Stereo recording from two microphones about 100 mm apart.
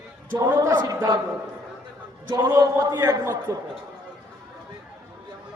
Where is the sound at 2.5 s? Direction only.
35° right (ahead or behind).